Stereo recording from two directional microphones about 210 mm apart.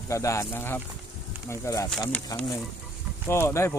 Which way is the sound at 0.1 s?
15° left (ahead or behind).